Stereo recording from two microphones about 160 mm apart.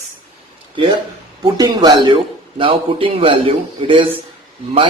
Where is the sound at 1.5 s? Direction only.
25° right (ahead or behind).